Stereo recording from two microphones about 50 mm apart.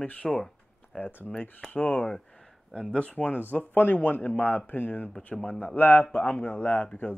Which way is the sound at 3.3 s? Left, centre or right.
Left.